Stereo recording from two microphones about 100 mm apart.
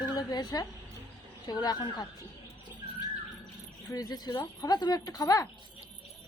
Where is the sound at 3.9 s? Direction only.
40° left (ahead or behind).